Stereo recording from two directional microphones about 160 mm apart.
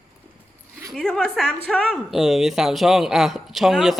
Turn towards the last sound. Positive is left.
turn(degrees=0)  # may be behind; listen again after turning